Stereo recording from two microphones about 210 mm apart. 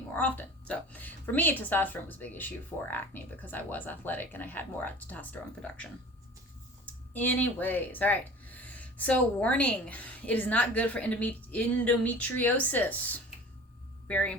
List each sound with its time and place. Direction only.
0.2 s speech: 5° left (ahead or behind)
7.1 s speech: 10° left (ahead or behind)